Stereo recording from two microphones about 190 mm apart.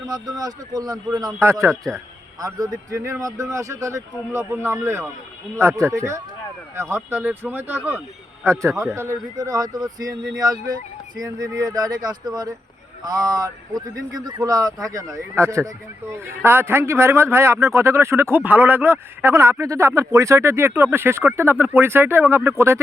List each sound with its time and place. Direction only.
0.0 s speech: 20° right (ahead or behind)